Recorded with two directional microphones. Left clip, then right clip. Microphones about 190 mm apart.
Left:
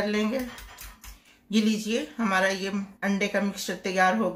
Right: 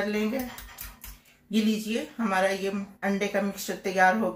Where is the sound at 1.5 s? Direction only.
40° left (ahead or behind).